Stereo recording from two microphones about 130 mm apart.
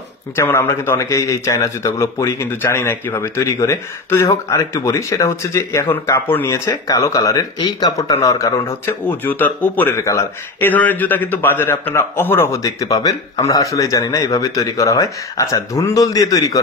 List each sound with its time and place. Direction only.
0.4 s speech: 20° left (ahead or behind)
6.5 s speech: 25° left (ahead or behind)